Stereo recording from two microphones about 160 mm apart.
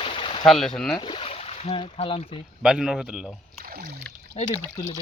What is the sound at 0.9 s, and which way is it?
Speech, 30° left (ahead or behind).